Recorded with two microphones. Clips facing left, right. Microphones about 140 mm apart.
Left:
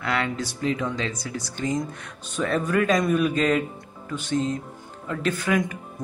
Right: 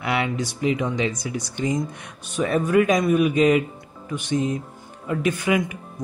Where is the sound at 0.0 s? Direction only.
15° right (ahead or behind).